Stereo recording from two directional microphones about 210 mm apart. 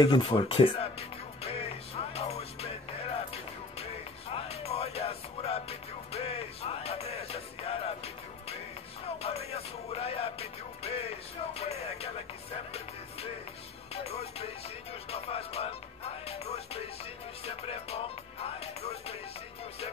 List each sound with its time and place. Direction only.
0.0 s speech: 25° left (ahead or behind)
2.1 s music: 30° left (ahead or behind)
13.9 s music: 30° left (ahead or behind)